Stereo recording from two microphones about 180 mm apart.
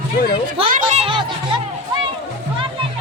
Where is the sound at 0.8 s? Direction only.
30° right (ahead or behind).